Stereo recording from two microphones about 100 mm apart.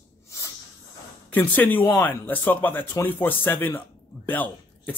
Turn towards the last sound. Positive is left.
turn(degrees=15)  # may be behind; listen again after turning